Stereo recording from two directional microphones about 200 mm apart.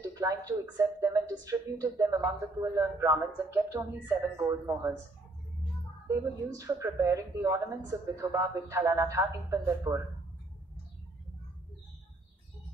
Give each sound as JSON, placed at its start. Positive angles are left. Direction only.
{"t": 0.0, "sound": "speech", "side_deg": -15}
{"t": 6.0, "sound": "speech", "side_deg": -15}